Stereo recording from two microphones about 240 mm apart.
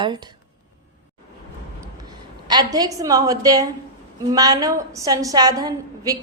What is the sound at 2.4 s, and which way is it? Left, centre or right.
A woman's voice, centre.